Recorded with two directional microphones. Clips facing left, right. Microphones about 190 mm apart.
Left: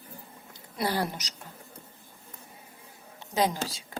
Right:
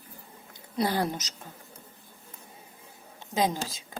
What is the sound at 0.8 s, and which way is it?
Speech, 20° right (ahead or behind).